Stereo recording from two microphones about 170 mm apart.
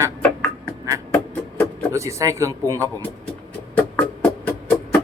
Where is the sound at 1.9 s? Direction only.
20° right (ahead or behind).